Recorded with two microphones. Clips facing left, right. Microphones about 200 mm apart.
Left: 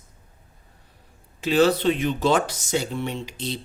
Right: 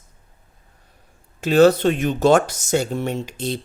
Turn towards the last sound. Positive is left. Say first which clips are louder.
# right 5 dB
turn(degrees=-50)  # may be behind; listen again after turning